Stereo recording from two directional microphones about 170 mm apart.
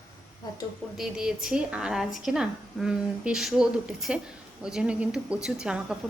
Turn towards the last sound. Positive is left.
turn(degrees=-5)  # may be behind; listen again after turning